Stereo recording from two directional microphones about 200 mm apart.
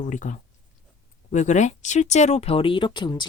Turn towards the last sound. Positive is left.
turn(degrees=25)  # may be behind; listen again after turning